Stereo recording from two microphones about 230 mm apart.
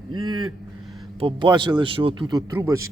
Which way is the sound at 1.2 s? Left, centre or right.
Right.